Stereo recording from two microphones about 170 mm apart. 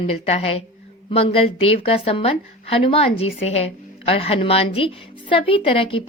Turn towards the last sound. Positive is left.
turn(degrees=30)  # may be behind; listen again after turning